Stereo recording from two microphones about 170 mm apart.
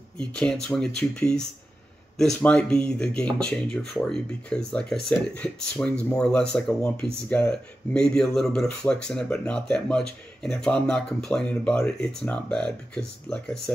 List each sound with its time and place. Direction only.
0.2 s speech: 5° left (ahead or behind)